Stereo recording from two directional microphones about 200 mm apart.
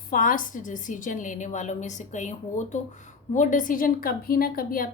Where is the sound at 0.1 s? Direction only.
45° left (ahead or behind).